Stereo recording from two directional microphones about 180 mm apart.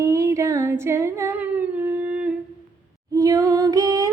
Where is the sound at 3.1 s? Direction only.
20° right (ahead or behind).